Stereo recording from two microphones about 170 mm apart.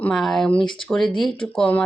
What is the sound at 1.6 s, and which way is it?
Speech, 10° left (ahead or behind).